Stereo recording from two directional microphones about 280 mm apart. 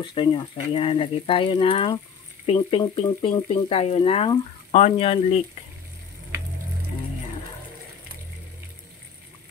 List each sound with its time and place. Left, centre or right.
0.0 s speech: centre